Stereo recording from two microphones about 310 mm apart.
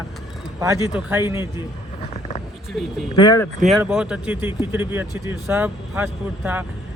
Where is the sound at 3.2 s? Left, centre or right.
Centre.